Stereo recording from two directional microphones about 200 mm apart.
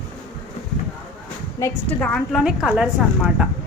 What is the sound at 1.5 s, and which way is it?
Speech, 15° left (ahead or behind).